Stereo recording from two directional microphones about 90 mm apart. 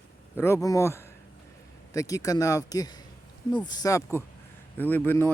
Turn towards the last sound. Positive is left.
turn(degrees=25)  # may be behind; listen again after turning